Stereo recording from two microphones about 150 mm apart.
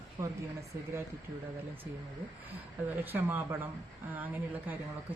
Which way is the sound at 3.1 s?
15° right (ahead or behind).